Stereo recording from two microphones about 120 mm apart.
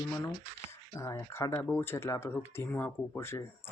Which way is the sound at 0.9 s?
25° left (ahead or behind).